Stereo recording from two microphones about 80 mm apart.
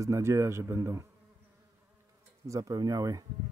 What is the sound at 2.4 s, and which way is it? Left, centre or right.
Speech, right.